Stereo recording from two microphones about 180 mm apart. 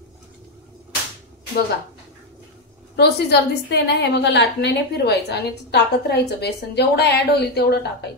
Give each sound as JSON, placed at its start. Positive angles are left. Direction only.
{"t": 3.0, "sound": "a woman's voice", "side_deg": 70}